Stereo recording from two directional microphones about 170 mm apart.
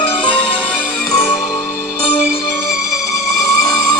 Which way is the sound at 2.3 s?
15° left (ahead or behind).